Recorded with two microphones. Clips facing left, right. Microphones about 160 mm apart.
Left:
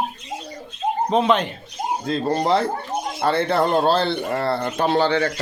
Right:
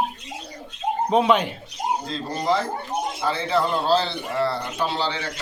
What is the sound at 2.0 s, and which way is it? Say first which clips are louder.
Speech: left 4 dB; 60° left (ahead or behind).